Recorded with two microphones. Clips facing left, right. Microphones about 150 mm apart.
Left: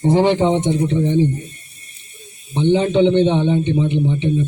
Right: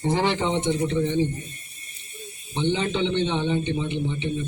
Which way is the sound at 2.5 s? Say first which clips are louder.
Left 9 dB; 15° left (ahead or behind).